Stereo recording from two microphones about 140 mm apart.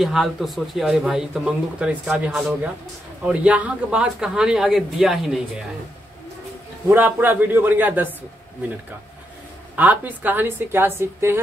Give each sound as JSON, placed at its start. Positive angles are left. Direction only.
{"t": 0.0, "sound": "speech", "side_deg": 0}
{"t": 6.9, "sound": "a woman's voice", "side_deg": -15}
{"t": 9.8, "sound": "a woman's voice", "side_deg": -10}